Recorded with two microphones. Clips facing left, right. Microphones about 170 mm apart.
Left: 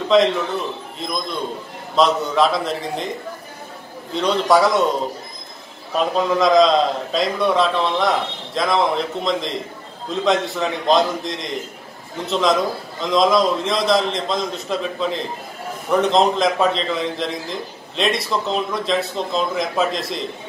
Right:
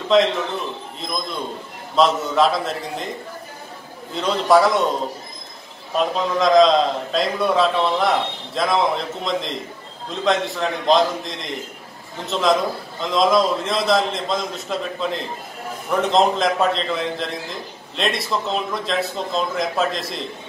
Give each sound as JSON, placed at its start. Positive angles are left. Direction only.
{"t": 0.1, "sound": "a man's voice", "side_deg": 0}
{"t": 4.1, "sound": "a man's voice", "side_deg": 0}
{"t": 5.9, "sound": "a man's voice", "side_deg": 0}